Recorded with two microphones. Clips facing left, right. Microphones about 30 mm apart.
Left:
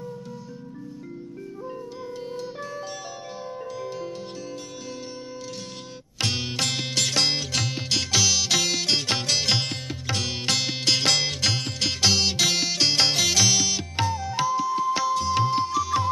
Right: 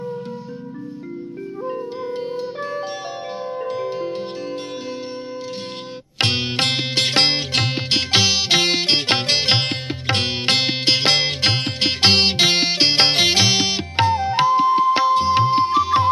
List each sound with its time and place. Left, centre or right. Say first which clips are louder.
1.7 s music: right 10 dB; right
6.1 s music: right 7 dB; right